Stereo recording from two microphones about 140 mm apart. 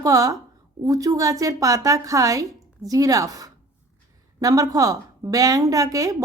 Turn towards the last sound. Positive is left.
turn(degrees=-25)  # may be behind; listen again after turning